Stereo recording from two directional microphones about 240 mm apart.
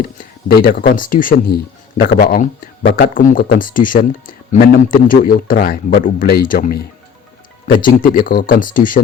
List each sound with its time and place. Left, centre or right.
0.0 s speech: left
7.9 s speech: left